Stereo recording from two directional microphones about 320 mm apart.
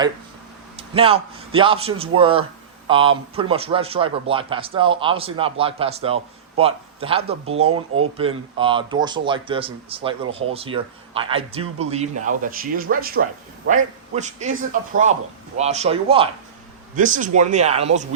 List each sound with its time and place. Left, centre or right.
0.8 s a man's voice: centre
7.7 s speech: right
8.2 s a man's voice: centre